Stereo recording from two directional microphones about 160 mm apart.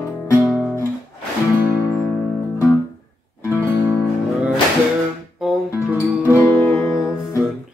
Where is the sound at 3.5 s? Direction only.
10° left (ahead or behind).